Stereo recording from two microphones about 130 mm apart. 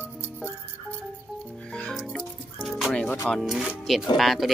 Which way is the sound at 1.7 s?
5° left (ahead or behind).